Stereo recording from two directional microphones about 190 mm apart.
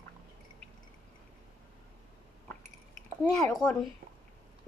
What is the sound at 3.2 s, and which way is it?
Speech, centre (ahead or behind).